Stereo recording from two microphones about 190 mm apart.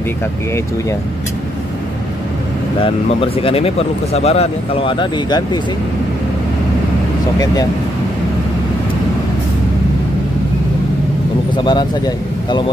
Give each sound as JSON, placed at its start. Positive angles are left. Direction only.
{"t": 2.8, "sound": "speech", "side_deg": 30}
{"t": 11.5, "sound": "speech", "side_deg": 25}